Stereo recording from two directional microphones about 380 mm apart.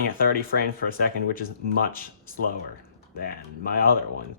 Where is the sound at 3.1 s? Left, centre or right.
Left.